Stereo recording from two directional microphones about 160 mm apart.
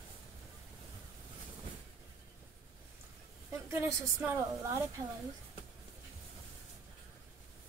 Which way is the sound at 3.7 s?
15° right (ahead or behind).